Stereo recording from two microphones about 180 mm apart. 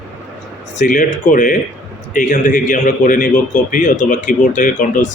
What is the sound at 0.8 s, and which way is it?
A man's voice, 45° left (ahead or behind).